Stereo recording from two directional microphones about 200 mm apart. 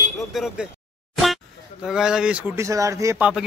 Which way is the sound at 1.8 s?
Centre (ahead or behind).